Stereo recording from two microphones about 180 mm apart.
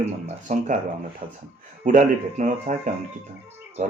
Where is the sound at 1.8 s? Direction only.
45° right (ahead or behind).